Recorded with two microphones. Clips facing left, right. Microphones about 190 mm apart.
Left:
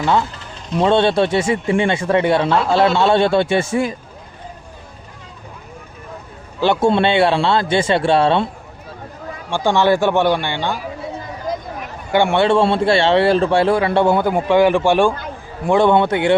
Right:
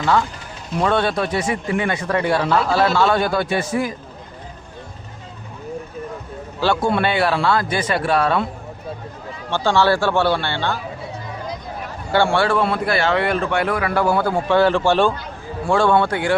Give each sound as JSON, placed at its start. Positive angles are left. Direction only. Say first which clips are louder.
{"t": 0.0, "sound": "a man's voice", "louder": "left 1 dB", "side_deg": 20}
{"t": 6.6, "sound": "a man's voice", "louder": "left 4 dB", "side_deg": 20}
{"t": 9.5, "sound": "speech", "louder": "left 2 dB", "side_deg": 15}
{"t": 12.1, "sound": "a man's voice", "louder": "left 3 dB", "side_deg": 20}